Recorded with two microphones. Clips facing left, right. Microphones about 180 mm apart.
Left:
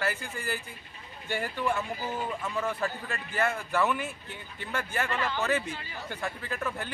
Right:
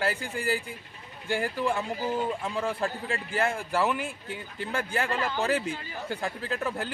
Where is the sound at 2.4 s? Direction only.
30° right (ahead or behind).